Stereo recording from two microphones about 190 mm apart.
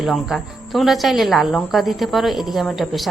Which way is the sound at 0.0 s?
Centre (ahead or behind).